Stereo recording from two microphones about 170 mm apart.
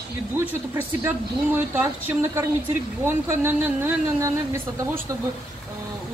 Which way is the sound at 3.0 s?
15° right (ahead or behind).